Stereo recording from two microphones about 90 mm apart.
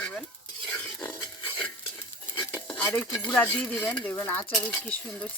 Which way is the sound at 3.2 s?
15° left (ahead or behind).